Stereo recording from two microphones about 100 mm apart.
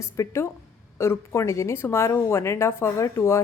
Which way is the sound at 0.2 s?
30° left (ahead or behind).